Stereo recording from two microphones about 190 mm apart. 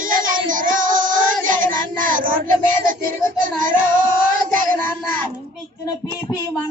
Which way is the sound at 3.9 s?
45° right (ahead or behind).